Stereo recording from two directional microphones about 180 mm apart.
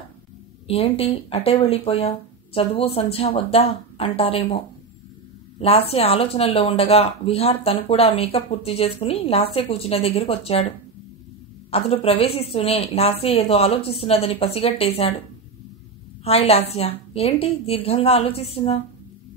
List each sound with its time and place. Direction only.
0.7 s speech: 35° left (ahead or behind)
11.7 s speech: 30° left (ahead or behind)
16.3 s speech: 35° left (ahead or behind)